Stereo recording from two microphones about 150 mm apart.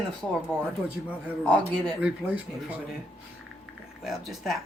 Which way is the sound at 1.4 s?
5° left (ahead or behind).